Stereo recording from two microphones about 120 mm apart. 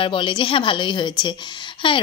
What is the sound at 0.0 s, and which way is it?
Speech, 45° left (ahead or behind).